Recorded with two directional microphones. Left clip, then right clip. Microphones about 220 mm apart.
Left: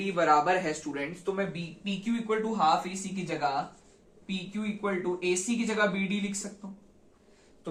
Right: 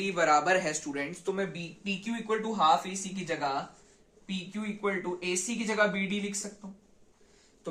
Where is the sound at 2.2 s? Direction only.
35° right (ahead or behind).